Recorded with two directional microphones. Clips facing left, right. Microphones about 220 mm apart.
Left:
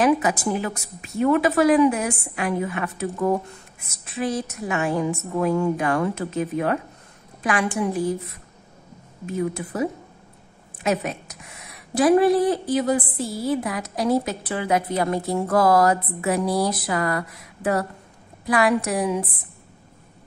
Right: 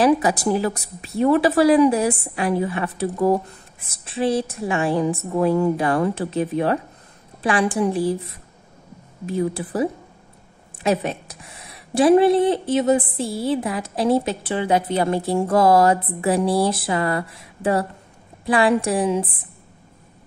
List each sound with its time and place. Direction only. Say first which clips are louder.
0.0 s a woman's voice: right 2 dB; 35° right (ahead or behind)
9.2 s a woman's voice: right 3 dB; 30° right (ahead or behind)